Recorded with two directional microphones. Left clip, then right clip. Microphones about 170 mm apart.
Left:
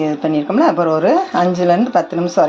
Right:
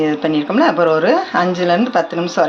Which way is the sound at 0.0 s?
35° left (ahead or behind).